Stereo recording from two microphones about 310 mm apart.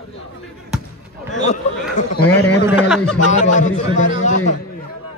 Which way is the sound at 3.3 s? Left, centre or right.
Left.